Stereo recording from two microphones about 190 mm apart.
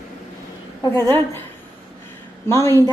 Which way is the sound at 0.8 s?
10° left (ahead or behind).